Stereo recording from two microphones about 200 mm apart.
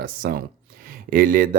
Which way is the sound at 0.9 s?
45° right (ahead or behind).